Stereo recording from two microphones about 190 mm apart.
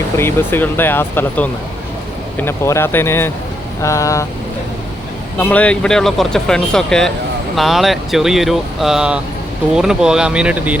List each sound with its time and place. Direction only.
0.2 s speech: 10° left (ahead or behind)
5.4 s speech: 10° left (ahead or behind)